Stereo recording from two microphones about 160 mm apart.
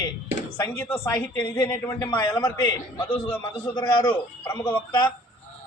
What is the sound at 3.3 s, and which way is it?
Speech, 15° left (ahead or behind).